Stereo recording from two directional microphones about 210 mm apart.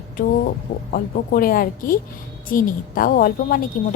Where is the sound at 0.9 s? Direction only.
45° left (ahead or behind).